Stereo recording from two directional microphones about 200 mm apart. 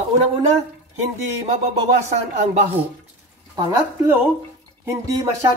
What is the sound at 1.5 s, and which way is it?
Speech, 35° right (ahead or behind).